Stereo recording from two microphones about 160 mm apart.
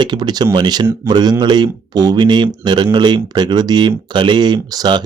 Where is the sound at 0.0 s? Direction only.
25° right (ahead or behind).